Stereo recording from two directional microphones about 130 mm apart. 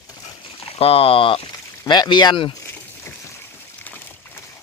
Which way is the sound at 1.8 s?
35° left (ahead or behind).